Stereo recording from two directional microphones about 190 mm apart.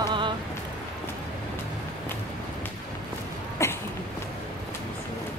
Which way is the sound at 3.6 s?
15° left (ahead or behind).